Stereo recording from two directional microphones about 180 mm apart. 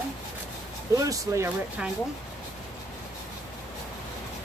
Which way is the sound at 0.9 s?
20° right (ahead or behind).